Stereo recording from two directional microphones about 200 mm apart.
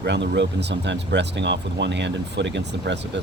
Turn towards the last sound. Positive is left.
turn(degrees=-60)  # may be behind; listen again after turning